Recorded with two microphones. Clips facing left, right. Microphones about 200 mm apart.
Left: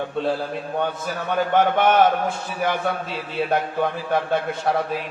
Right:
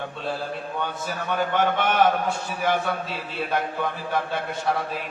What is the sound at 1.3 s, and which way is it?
Speech, 50° left (ahead or behind).